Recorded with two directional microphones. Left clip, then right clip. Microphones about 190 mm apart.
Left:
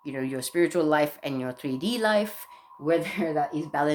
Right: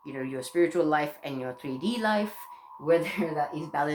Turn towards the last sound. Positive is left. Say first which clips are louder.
# left 3 dB
turn(degrees=55)  # may be behind; listen again after turning